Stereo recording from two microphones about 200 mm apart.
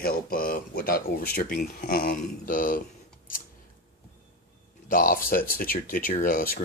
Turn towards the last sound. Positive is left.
turn(degrees=45)  # may be behind; listen again after turning